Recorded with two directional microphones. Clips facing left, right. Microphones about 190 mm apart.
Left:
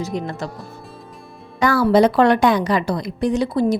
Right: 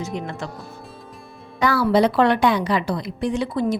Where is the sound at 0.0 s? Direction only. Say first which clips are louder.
Left 3 dB; 35° left (ahead or behind).